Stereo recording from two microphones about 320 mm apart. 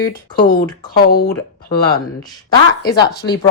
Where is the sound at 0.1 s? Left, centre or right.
Left.